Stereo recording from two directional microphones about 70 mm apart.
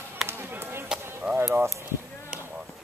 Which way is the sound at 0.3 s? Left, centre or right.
Right.